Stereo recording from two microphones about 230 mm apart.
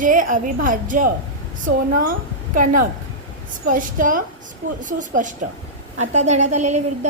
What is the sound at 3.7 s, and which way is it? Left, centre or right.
A woman's voice, right.